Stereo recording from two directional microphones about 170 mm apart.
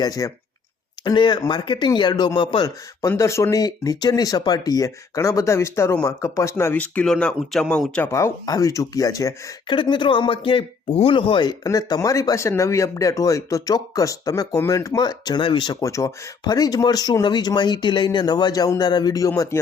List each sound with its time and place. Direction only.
0.0 s speech: 20° left (ahead or behind)
8.1 s speech: 20° left (ahead or behind)